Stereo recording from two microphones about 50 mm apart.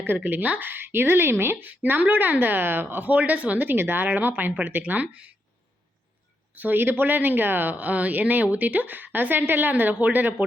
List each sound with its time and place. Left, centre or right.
0.3 s speech: right
6.5 s speech: right